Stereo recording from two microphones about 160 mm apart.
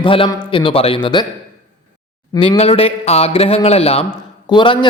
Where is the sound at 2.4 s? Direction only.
35° left (ahead or behind).